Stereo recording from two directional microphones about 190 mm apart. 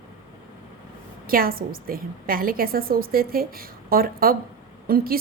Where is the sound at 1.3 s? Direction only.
50° right (ahead or behind).